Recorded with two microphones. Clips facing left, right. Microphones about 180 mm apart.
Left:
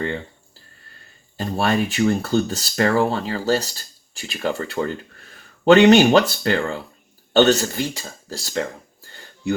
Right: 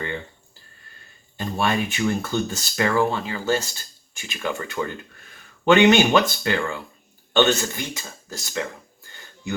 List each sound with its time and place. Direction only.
1.4 s speech: 35° left (ahead or behind)